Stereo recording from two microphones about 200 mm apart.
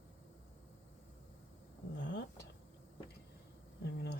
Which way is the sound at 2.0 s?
60° left (ahead or behind).